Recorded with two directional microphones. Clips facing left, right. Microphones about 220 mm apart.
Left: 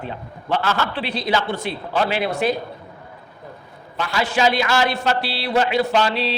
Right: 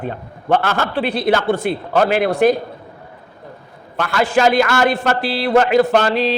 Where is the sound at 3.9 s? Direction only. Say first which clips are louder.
Right 5 dB; 55° right (ahead or behind).